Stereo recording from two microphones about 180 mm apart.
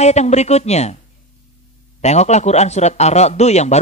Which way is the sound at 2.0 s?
40° left (ahead or behind).